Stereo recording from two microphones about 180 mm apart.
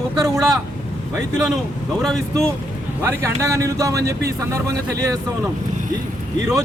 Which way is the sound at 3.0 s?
15° right (ahead or behind).